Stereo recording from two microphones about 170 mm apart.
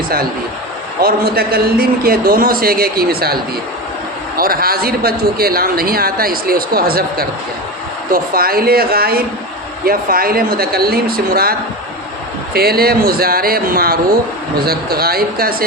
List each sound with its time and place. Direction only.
1.0 s speech: 60° right (ahead or behind)
4.4 s speech: 60° right (ahead or behind)
12.5 s speech: 65° right (ahead or behind)